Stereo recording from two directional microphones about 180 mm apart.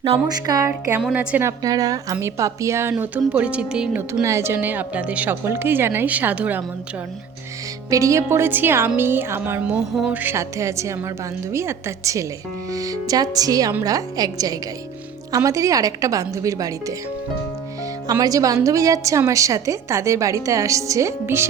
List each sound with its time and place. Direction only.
0.0 s a woman's voice: 30° right (ahead or behind)
0.4 s a woman's voice: 20° right (ahead or behind)
0.9 s a woman's voice: 5° right (ahead or behind)
4.1 s a woman's voice: 15° right (ahead or behind)
7.9 s a woman's voice: 20° right (ahead or behind)
18.1 s a woman's voice: 20° right (ahead or behind)